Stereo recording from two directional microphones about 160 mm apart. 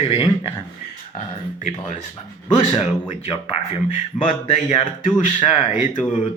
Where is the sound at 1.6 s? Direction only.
50° left (ahead or behind).